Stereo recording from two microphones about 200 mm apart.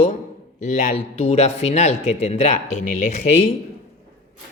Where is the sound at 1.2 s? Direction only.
30° left (ahead or behind).